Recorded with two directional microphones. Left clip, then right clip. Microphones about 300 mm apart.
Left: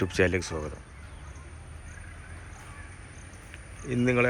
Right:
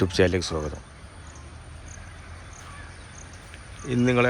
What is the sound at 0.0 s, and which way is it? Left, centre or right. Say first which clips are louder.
Speech: right 4 dB; centre.